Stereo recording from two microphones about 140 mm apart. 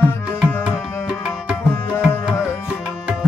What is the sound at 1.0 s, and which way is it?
Music, 5° right (ahead or behind).